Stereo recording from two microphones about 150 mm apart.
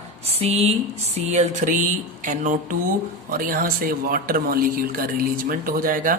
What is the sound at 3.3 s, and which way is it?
A man's voice, 70° right (ahead or behind).